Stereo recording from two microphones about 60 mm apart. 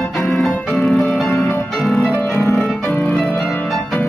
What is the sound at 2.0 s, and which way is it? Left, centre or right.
Music, centre.